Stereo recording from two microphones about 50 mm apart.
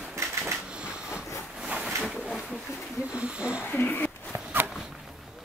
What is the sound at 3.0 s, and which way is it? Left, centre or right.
Sniff, right.